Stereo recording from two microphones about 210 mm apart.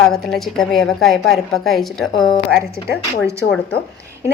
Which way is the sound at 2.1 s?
20° left (ahead or behind).